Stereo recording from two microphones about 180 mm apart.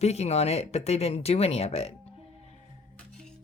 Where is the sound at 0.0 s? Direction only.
35° left (ahead or behind).